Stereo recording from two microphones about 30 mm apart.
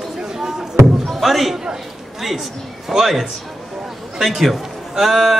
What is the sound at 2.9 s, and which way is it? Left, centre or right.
Speech, centre.